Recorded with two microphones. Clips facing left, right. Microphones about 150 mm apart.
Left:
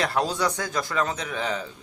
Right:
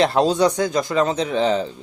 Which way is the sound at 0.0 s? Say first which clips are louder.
Right 8 dB; 25° right (ahead or behind).